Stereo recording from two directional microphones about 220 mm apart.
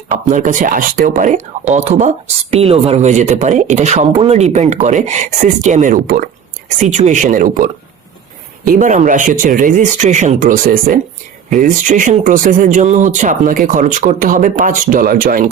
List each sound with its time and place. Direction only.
0.1 s speech: 35° right (ahead or behind)